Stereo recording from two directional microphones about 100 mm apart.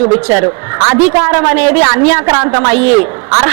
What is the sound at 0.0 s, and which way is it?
A man's voice, 25° right (ahead or behind).